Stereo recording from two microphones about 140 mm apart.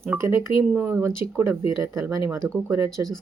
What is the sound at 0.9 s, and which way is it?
Speech, 20° right (ahead or behind).